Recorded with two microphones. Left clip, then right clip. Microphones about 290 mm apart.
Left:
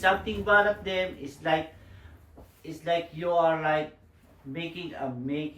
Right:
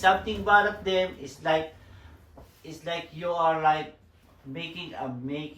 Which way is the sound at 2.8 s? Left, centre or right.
Centre.